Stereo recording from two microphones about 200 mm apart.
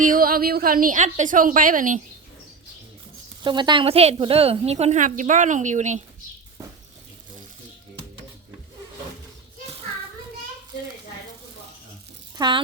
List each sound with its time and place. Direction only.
0.0 s a woman's voice: 45° right (ahead or behind)
3.4 s a woman's voice: 25° right (ahead or behind)
12.4 s speech: 20° right (ahead or behind)